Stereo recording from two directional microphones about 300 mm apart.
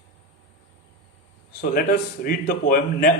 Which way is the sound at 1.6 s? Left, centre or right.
Left.